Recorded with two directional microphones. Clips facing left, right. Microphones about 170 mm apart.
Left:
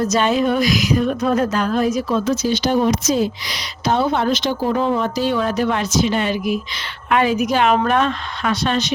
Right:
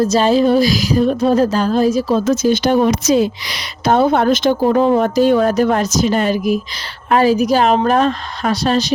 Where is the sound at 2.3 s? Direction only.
50° right (ahead or behind).